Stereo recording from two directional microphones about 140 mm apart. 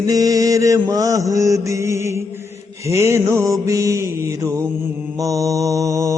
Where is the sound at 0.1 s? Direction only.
25° right (ahead or behind).